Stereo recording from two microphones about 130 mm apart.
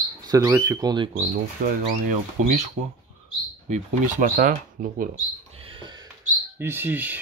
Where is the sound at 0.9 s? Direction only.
40° right (ahead or behind).